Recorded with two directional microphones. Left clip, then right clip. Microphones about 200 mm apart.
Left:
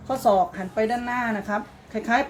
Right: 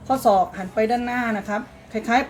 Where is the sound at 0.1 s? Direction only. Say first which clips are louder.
Right 2 dB; 25° left (ahead or behind).